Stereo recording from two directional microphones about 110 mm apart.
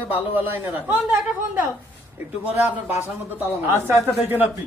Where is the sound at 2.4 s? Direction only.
15° right (ahead or behind).